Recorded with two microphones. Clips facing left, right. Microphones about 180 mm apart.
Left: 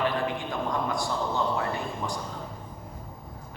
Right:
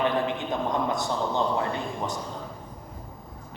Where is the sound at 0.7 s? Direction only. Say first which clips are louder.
Right 1 dB; 20° right (ahead or behind).